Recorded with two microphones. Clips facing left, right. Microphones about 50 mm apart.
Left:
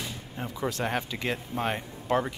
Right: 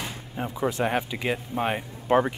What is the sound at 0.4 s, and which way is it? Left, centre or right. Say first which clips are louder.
Speech: right 5 dB; centre.